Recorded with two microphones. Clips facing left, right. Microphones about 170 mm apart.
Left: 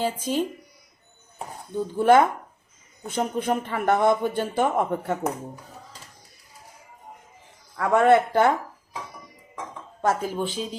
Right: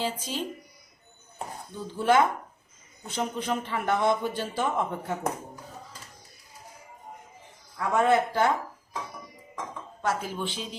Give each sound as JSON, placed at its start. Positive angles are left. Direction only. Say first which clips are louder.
{"t": 0.0, "sound": "a man's voice", "louder": "left 6 dB", "side_deg": 50}
{"t": 2.0, "sound": "a man's voice", "louder": "left 5 dB", "side_deg": 50}
{"t": 7.8, "sound": "speech", "louder": "left 5 dB", "side_deg": 65}
{"t": 10.0, "sound": "a man's voice", "louder": "left 5 dB", "side_deg": 45}